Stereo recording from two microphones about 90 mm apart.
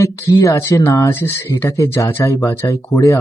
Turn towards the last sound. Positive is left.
turn(degrees=35)  # may be behind; listen again after turning